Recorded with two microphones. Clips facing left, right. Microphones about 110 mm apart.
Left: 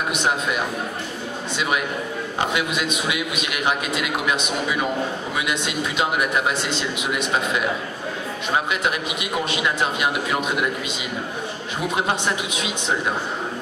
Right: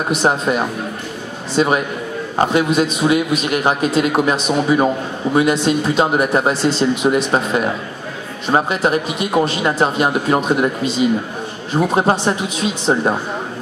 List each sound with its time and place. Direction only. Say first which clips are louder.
0.1 s a man's voice: right 9 dB; 35° right (ahead or behind)